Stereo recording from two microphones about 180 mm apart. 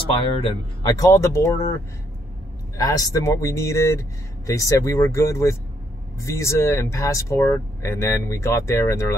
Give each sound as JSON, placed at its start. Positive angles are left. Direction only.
{"t": 0.4, "sound": "speech", "side_deg": 20}
{"t": 2.8, "sound": "speech", "side_deg": 20}